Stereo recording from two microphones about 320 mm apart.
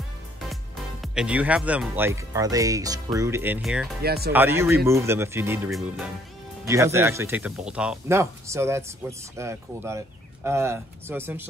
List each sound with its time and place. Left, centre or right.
1.0 s speech: centre
4.0 s speech: right
4.3 s speech: centre